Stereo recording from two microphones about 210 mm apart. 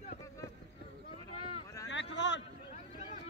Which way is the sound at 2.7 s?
35° left (ahead or behind).